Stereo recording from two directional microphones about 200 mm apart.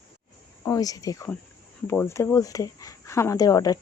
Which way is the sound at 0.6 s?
15° left (ahead or behind).